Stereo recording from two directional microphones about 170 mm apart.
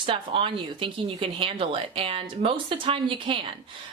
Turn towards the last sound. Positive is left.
turn(degrees=-30)  # may be behind; listen again after turning